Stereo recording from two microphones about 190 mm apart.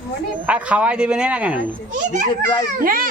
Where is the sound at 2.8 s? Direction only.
50° right (ahead or behind).